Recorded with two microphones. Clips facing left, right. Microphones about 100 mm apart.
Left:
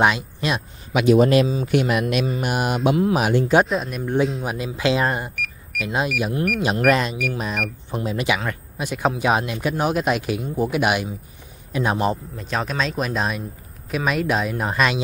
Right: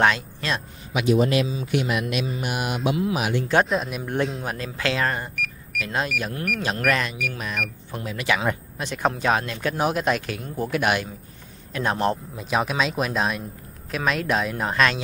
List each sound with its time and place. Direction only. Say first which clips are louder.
0.0 s speech: left 2 dB; 15° left (ahead or behind)
0.9 s a man's voice: left 5 dB; 60° left (ahead or behind)
1.3 s mantra: left 5 dB; 45° left (ahead or behind)
3.6 s speech: left 1 dB; centre (ahead or behind)
4.6 s speech: left 5 dB; 15° left (ahead or behind)
5.3 s a sound: even; centre (ahead or behind)
5.9 s speech: left 4 dB; 10° left (ahead or behind)
6.8 s speech: left 6 dB; 20° left (ahead or behind)
8.7 s speech: left 2 dB; 5° left (ahead or behind)
9.8 s speech: left 1 dB; centre (ahead or behind)
12.4 s speech: right 1 dB; 5° right (ahead or behind)